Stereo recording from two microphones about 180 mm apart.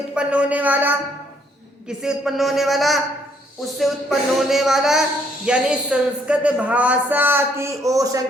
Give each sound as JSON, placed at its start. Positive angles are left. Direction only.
{"t": 0.1, "sound": "speech", "side_deg": -5}